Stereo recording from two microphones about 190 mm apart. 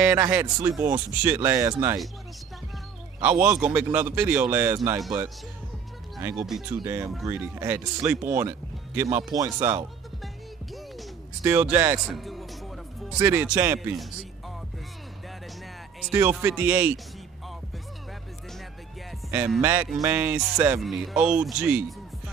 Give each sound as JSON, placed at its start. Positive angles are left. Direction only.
{"t": 0.0, "sound": "speech", "side_deg": -5}
{"t": 3.2, "sound": "speech", "side_deg": -10}
{"t": 4.7, "sound": "speech", "side_deg": -20}
{"t": 6.2, "sound": "speech", "side_deg": 0}
{"t": 11.4, "sound": "speech", "side_deg": -10}
{"t": 12.0, "sound": "speech", "side_deg": 0}
{"t": 16.1, "sound": "speech", "side_deg": -10}
{"t": 19.3, "sound": "speech", "side_deg": -10}